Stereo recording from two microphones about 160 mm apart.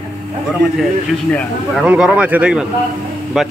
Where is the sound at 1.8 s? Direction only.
5° right (ahead or behind).